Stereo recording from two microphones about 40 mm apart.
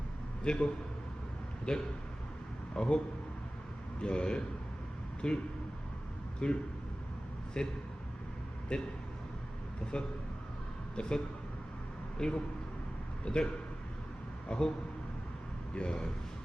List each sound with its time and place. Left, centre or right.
0.4 s speech: left
4.0 s speech: left
6.4 s speech: left
7.6 s speech: centre
9.9 s speech: left
12.2 s speech: centre
15.7 s speech: left